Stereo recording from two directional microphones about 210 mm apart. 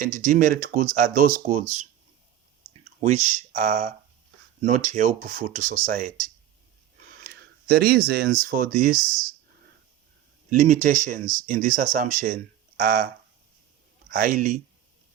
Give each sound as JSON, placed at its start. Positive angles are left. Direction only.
{"t": 0.0, "sound": "speech", "side_deg": -40}
{"t": 3.0, "sound": "speech", "side_deg": -35}
{"t": 10.5, "sound": "speech", "side_deg": -40}
{"t": 14.1, "sound": "speech", "side_deg": -40}